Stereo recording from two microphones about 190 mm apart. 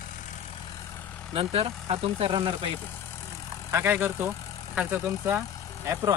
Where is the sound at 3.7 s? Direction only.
15° right (ahead or behind).